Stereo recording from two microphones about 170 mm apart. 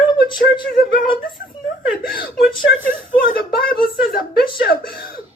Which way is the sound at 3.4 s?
60° left (ahead or behind).